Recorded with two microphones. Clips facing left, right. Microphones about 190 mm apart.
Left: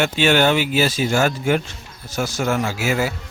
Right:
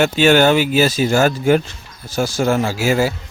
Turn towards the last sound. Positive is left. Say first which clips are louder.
# right 4 dB
turn(degrees=-30)  # may be behind; listen again after turning